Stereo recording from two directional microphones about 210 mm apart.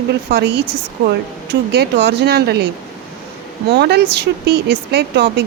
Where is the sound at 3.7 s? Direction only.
50° right (ahead or behind).